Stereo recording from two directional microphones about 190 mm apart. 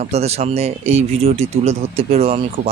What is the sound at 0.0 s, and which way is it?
Speech, 35° right (ahead or behind).